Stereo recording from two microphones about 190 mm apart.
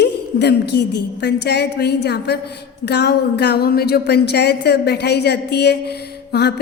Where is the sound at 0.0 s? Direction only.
60° left (ahead or behind).